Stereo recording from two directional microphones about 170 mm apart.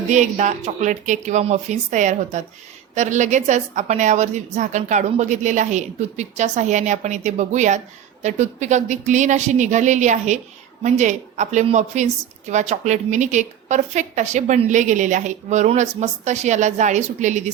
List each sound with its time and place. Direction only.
0.1 s a woman's voice: 45° right (ahead or behind)